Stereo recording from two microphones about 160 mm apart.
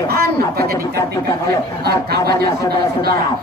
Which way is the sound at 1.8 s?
80° right.